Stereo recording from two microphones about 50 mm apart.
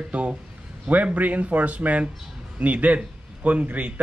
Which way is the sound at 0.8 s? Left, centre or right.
Right.